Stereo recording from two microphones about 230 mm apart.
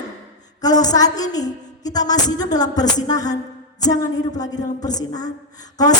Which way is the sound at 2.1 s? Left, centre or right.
Centre.